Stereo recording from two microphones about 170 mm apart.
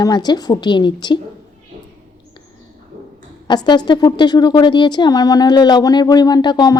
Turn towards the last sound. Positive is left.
turn(degrees=20)  # may be behind; listen again after turning